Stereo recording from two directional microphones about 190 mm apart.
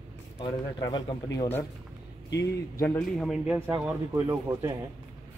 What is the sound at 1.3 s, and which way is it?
Speech, 10° left (ahead or behind).